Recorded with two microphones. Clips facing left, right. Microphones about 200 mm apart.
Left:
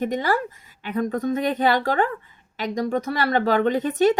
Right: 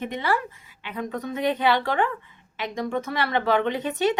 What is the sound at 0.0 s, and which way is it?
Speech, 40° left (ahead or behind).